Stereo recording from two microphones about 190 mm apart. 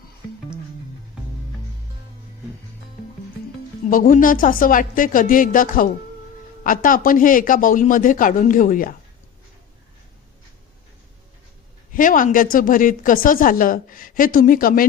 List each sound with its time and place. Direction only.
3.8 s a woman's voice: 45° left (ahead or behind)
11.9 s a woman's voice: 45° left (ahead or behind)